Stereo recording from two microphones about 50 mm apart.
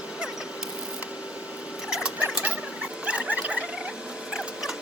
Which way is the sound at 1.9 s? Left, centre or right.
Centre.